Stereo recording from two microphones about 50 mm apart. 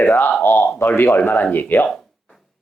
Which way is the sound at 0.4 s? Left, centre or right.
Left.